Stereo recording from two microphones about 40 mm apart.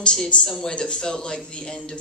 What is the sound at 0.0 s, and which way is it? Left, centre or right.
Speech, left.